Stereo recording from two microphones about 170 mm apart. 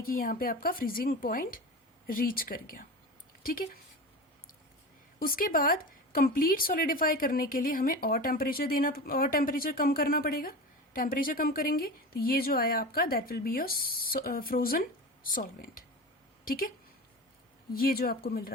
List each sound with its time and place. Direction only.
0.0 s speech: 55° left (ahead or behind)
5.2 s speech: 55° left (ahead or behind)